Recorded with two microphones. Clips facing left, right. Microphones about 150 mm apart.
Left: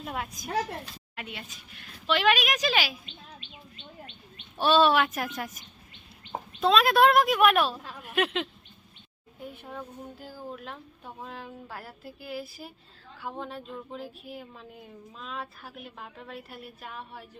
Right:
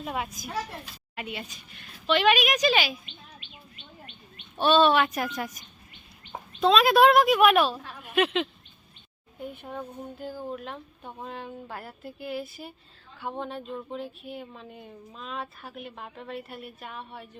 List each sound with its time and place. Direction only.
0.0 s speech: 5° right (ahead or behind)
4.5 s speech: 5° left (ahead or behind)
6.3 s bird: 20° left (ahead or behind)
6.6 s speech: centre (ahead or behind)